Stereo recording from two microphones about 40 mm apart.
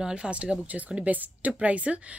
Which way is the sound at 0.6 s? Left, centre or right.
Right.